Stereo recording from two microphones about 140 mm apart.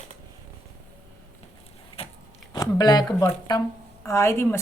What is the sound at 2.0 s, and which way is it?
Biting, 45° left (ahead or behind).